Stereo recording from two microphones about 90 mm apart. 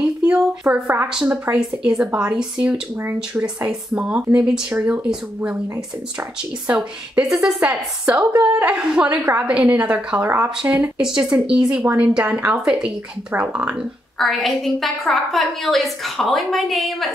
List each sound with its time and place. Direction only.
0.0 s a sound: 10° right (ahead or behind)
1.4 s a woman's voice: 15° right (ahead or behind)
6.7 s a woman's voice: 10° right (ahead or behind)
10.6 s a woman's voice: 10° right (ahead or behind)
11.8 s a woman's voice: 20° right (ahead or behind)
12.1 s a woman's voice: 10° right (ahead or behind)
14.1 s a woman's voice: centre (ahead or behind)